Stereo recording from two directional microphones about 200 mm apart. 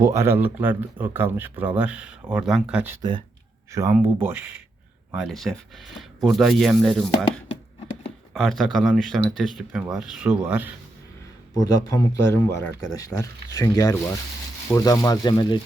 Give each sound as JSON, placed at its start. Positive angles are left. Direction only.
{"t": 0.0, "sound": "speech", "side_deg": -15}
{"t": 3.0, "sound": "speech", "side_deg": -25}
{"t": 8.3, "sound": "speech", "side_deg": 0}
{"t": 11.5, "sound": "speech", "side_deg": 20}